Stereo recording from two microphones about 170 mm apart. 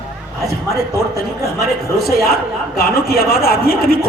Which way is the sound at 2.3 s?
60° left (ahead or behind).